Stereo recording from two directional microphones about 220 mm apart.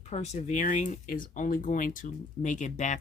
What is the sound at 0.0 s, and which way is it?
Speech, 30° left (ahead or behind).